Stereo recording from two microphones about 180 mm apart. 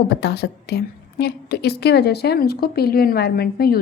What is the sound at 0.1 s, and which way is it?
A woman's voice, 65° left (ahead or behind).